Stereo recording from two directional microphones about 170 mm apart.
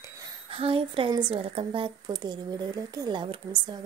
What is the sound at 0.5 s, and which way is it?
Speech, 30° right (ahead or behind).